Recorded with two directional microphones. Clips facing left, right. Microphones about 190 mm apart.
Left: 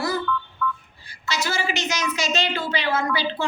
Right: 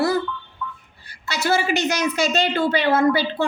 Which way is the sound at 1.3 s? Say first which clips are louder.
Right 5 dB; 60° right (ahead or behind).